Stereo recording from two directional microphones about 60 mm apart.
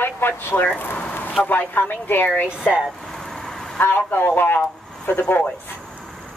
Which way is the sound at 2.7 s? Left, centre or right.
Centre.